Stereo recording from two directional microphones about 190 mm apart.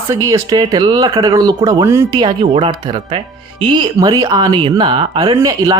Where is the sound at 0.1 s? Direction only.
15° right (ahead or behind).